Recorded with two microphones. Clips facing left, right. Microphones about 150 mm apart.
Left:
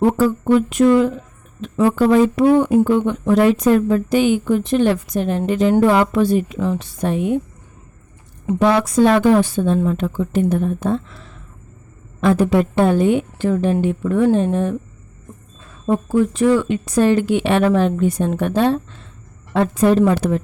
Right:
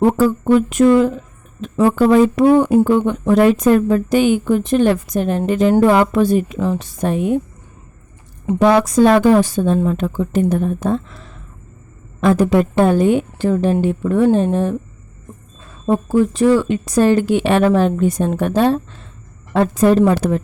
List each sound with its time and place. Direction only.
0.0 s speech: 40° right (ahead or behind)
8.5 s a woman's voice: 40° right (ahead or behind)